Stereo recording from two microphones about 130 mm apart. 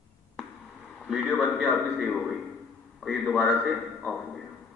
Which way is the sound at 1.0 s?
5° right (ahead or behind).